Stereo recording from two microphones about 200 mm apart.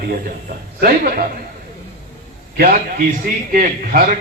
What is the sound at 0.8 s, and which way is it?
Speech, 45° right (ahead or behind).